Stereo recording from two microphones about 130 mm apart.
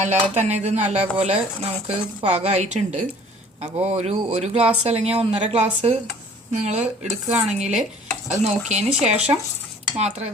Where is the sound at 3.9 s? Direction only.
55° right (ahead or behind).